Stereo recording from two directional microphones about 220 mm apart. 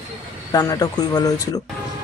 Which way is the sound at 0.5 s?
15° left (ahead or behind).